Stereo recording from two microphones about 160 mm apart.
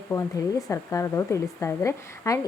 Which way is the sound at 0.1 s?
20° left (ahead or behind).